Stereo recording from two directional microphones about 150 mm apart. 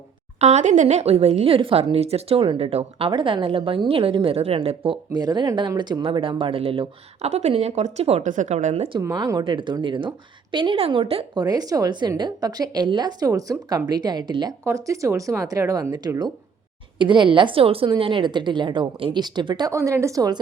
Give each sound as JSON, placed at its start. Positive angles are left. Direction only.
{"t": 0.3, "sound": "a woman's voice", "side_deg": -50}
{"t": 8.9, "sound": "a woman's voice", "side_deg": -25}
{"t": 11.3, "sound": "a woman's voice", "side_deg": -25}